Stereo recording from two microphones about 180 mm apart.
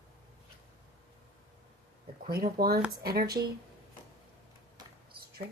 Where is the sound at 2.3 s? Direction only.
60° right (ahead or behind).